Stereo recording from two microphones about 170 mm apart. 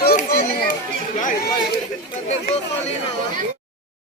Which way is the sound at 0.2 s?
55° left (ahead or behind).